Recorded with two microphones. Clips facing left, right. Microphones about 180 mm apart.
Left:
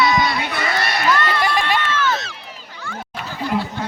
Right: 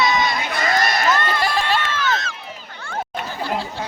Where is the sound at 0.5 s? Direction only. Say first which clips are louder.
Right 2 dB; 40° right (ahead or behind).